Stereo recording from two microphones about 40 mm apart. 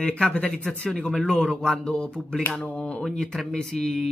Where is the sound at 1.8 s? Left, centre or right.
Left.